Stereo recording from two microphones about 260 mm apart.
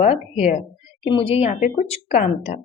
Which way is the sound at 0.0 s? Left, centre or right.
Left.